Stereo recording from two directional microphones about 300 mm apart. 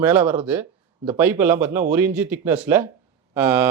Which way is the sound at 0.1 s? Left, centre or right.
Centre.